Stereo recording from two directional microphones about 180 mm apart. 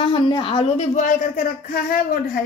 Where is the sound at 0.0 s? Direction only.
25° left (ahead or behind); by 2.1 s 55° left (ahead or behind).